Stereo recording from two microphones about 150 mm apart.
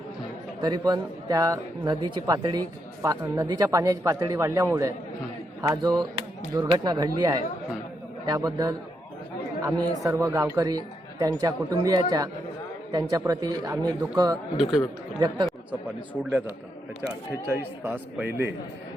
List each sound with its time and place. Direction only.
0.6 s speech: 25° right (ahead or behind)
14.5 s speech: centre (ahead or behind)
17.8 s speech: 10° right (ahead or behind)